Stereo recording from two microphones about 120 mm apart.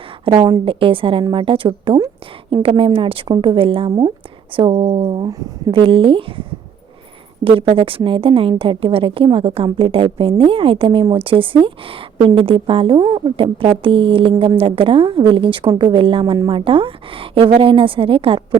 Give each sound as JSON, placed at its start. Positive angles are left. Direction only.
{"t": 0.3, "sound": "a woman's voice", "side_deg": -35}
{"t": 0.6, "sound": "a woman's voice", "side_deg": -45}
{"t": 7.4, "sound": "a woman's voice", "side_deg": -45}